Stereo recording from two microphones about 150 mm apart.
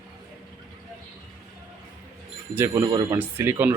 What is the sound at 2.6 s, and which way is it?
A man's voice, 20° right (ahead or behind).